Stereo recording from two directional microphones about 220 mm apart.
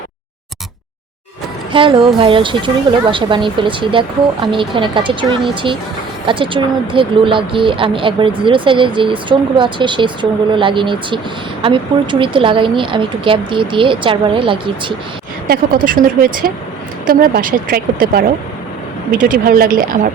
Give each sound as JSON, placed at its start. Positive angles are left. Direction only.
{"t": 1.7, "sound": "speech", "side_deg": -25}
{"t": 12.2, "sound": "speech", "side_deg": -20}
{"t": 15.4, "sound": "a woman's voice", "side_deg": -40}